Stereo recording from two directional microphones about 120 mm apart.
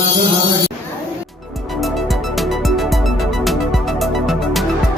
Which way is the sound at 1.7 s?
Centre (ahead or behind).